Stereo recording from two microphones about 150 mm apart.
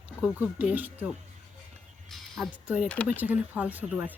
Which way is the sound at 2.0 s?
Centre (ahead or behind).